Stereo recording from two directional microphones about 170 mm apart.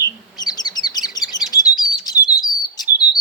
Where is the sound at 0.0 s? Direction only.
25° left (ahead or behind).